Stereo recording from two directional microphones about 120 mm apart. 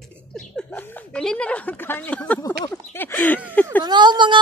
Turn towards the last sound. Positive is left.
turn(degrees=-40)  # may be behind; listen again after turning